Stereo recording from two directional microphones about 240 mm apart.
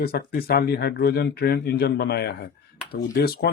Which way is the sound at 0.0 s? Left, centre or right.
Left.